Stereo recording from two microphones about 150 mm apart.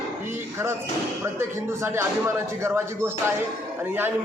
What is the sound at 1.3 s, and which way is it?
A man's voice, 15° right (ahead or behind).